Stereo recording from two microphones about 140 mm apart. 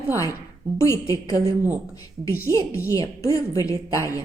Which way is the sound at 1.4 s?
15° right (ahead or behind).